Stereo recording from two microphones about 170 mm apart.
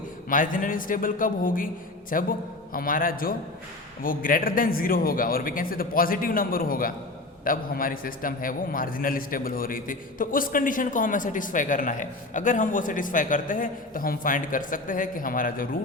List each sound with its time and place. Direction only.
0.3 s a man's voice: 50° left (ahead or behind)